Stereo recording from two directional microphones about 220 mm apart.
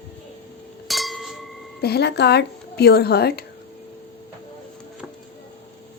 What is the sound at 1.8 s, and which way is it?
Speech, 50° left (ahead or behind).